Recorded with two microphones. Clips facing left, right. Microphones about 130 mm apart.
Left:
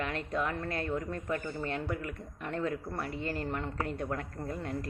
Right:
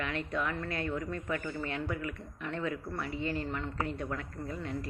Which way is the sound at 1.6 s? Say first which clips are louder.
Left 1 dB; 40° left (ahead or behind).